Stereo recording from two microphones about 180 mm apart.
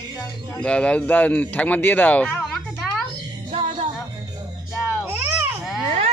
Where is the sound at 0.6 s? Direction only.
5° left (ahead or behind).